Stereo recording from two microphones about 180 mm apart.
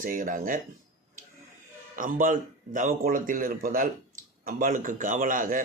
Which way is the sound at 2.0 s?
50° right (ahead or behind).